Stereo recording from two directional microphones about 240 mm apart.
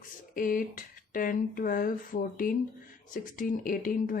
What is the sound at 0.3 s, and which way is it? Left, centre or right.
Speech, left.